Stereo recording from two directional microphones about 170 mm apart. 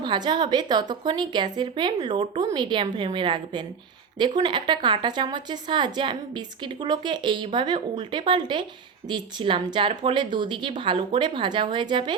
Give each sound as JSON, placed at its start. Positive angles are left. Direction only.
{"t": 0.0, "sound": "a woman's voice", "side_deg": -25}